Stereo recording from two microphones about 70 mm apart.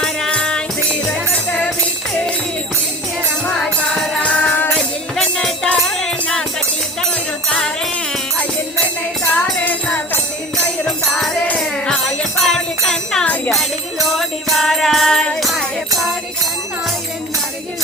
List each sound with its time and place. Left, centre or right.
0.3 s music: centre
3.6 s music: centre
4.2 s music: centre
9.3 s music: left
10.8 s music: centre